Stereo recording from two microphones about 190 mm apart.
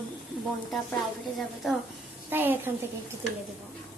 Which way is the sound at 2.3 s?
10° right (ahead or behind).